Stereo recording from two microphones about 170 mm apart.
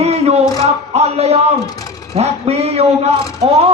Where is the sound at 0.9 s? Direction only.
40° right (ahead or behind).